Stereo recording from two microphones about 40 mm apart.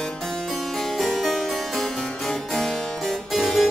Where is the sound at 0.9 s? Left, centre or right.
Centre.